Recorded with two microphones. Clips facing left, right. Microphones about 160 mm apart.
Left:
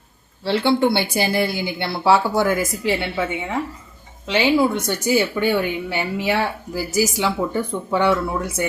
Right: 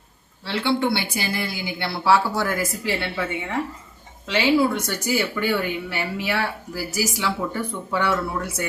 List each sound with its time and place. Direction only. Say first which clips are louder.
0.4 s speech: left 5 dB; 30° left (ahead or behind)